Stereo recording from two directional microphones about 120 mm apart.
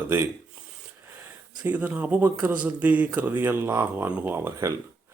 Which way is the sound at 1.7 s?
15° right (ahead or behind).